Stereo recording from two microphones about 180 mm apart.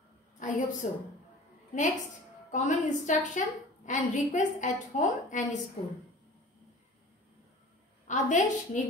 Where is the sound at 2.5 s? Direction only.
40° left (ahead or behind).